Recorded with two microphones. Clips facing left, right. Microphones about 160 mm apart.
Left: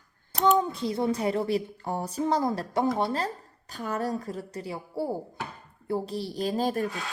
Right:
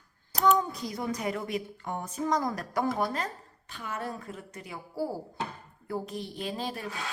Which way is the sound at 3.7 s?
40° left (ahead or behind).